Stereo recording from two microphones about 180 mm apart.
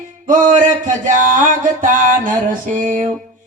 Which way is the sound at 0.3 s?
45° right (ahead or behind).